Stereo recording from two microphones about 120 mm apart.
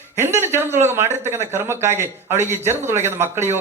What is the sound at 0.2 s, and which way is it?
Speech, 20° right (ahead or behind).